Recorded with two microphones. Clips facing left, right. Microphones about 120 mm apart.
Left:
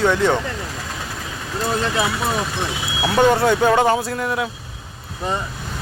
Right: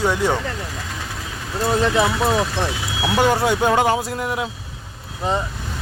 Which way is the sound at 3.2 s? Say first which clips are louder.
Left 3 dB; 10° right (ahead or behind).